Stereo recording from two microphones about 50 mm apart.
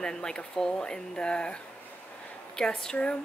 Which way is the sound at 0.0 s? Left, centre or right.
Centre.